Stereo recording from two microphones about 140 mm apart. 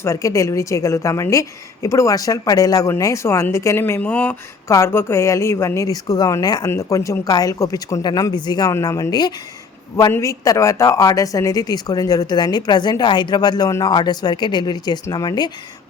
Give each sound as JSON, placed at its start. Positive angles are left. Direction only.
{"t": 0.0, "sound": "speech", "side_deg": 20}